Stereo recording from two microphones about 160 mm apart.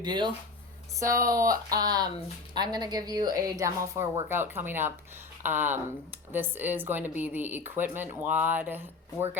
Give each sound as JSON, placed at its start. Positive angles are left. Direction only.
{"t": 0.0, "sound": "a woman's voice", "side_deg": -30}